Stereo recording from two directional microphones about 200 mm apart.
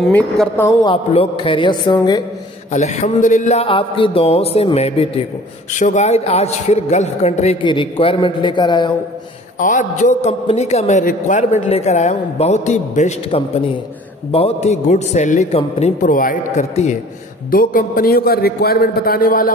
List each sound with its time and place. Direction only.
0.0 s speech: 5° left (ahead or behind)
0.8 s a woman's voice: 25° left (ahead or behind)
2.7 s a man's voice: 35° left (ahead or behind)
9.6 s a man's voice: 40° left (ahead or behind)